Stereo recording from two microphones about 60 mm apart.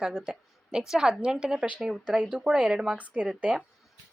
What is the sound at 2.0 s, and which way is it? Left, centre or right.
Speech, centre.